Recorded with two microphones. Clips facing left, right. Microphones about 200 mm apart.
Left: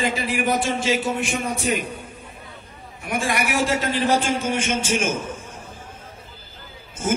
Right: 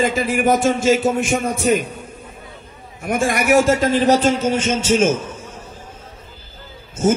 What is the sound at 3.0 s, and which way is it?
A man's voice, 45° right (ahead or behind).